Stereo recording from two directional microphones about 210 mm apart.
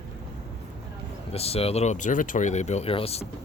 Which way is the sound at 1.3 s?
30° left (ahead or behind).